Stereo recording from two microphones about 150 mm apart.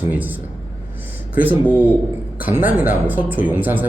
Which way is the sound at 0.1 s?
10° right (ahead or behind).